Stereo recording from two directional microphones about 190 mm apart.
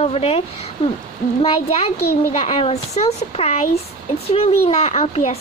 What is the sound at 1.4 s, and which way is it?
Speech, 30° left (ahead or behind).